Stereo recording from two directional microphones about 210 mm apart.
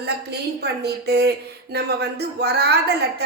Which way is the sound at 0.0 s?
50° right (ahead or behind).